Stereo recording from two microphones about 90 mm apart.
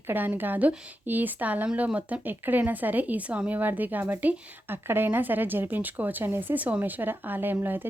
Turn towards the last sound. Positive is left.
turn(degrees=-20)  # may be behind; listen again after turning